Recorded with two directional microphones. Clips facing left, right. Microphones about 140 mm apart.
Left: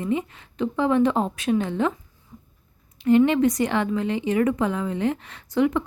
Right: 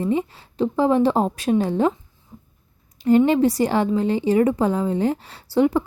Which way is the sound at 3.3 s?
35° right (ahead or behind).